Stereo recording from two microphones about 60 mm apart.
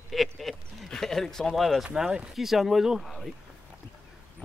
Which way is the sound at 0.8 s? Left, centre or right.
Centre.